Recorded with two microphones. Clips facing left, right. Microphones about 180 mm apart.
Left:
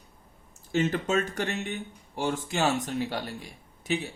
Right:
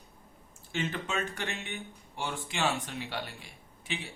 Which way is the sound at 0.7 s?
40° left (ahead or behind).